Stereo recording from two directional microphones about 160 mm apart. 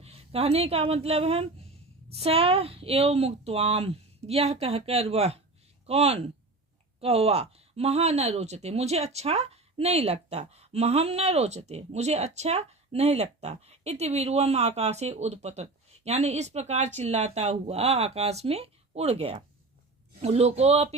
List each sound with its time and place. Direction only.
0.0 s speech: 40° right (ahead or behind)